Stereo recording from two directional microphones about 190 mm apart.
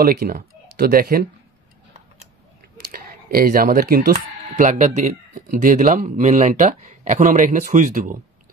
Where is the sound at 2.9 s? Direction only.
50° right (ahead or behind).